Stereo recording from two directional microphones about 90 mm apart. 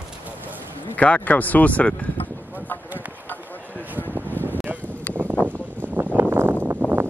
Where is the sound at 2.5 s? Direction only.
20° left (ahead or behind).